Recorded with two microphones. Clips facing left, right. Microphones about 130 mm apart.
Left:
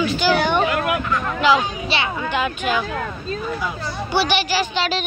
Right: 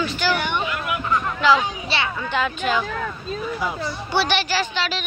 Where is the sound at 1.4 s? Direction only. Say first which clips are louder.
Left 2 dB; 15° left (ahead or behind).